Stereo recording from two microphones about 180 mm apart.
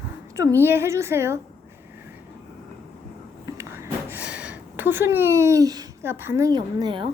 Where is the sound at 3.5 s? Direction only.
15° right (ahead or behind).